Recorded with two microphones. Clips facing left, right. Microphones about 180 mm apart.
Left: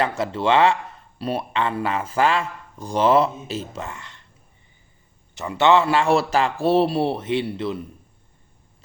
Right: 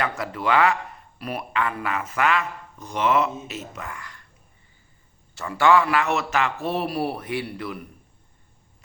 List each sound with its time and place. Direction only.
0.0 s speech: 25° left (ahead or behind)
5.3 s speech: 20° left (ahead or behind)